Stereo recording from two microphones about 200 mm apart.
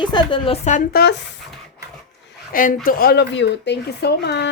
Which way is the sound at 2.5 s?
45° left (ahead or behind).